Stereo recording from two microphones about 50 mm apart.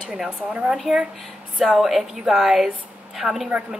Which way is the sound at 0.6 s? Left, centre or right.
Centre.